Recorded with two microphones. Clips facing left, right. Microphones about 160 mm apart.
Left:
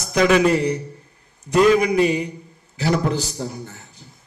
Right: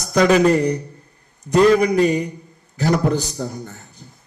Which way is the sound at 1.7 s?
35° right (ahead or behind).